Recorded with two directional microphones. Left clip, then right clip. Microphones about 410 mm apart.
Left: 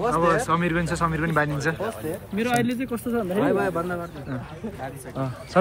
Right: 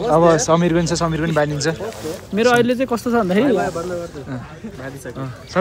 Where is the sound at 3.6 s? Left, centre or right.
Left.